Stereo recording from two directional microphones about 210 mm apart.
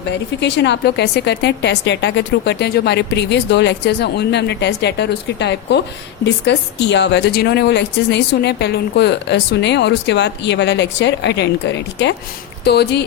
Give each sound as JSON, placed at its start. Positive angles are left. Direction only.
{"t": 0.3, "sound": "speech", "side_deg": 55}